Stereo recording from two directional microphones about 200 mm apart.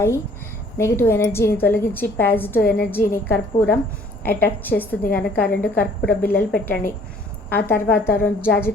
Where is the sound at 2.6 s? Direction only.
50° left (ahead or behind).